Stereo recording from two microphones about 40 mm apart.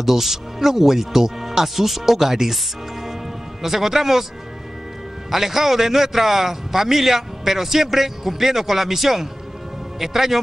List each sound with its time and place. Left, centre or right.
0.0 s a man's voice: centre
3.6 s a man's voice: centre
5.3 s a man's voice: centre